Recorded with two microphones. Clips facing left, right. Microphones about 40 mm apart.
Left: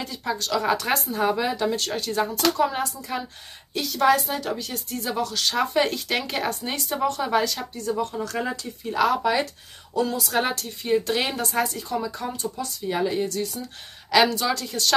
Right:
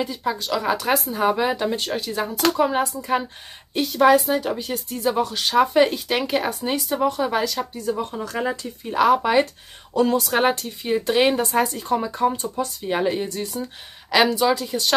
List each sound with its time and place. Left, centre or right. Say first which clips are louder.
0.0 s speech: right 4 dB; centre
1.2 s speech: right 2 dB; right
1.9 s speech: even; centre
2.4 s speech: right 5 dB; centre
3.0 s a woman's voice: right 7 dB; right
4.0 s speech: right 4 dB; centre
7.7 s speech: right 1 dB; centre
9.9 s speech: right 6 dB; right
10.3 s speech: right 5 dB; right
14.1 s speech: right 2 dB; centre